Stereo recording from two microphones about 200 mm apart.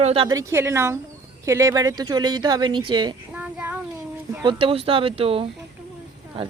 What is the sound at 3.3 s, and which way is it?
Child singing, 5° right (ahead or behind).